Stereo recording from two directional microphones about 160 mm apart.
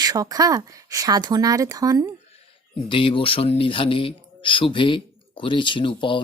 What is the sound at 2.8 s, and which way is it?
Speech, 35° left (ahead or behind).